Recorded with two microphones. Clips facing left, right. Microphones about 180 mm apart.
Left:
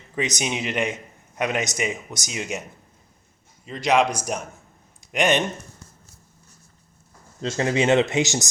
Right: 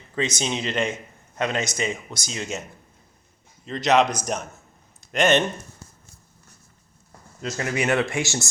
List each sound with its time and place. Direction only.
0.2 s a man's voice: 15° left (ahead or behind)
3.7 s a man's voice: 10° left (ahead or behind)
4.9 s a sound: 15° left (ahead or behind)
7.4 s speech: 25° left (ahead or behind)